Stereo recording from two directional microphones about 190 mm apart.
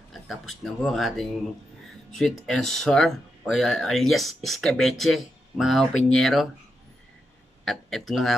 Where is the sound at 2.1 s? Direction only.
Centre (ahead or behind).